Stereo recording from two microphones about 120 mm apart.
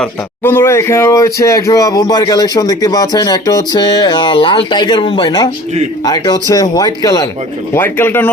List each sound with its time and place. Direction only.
0.4 s speech: 20° left (ahead or behind)
7.7 s speech: 20° left (ahead or behind)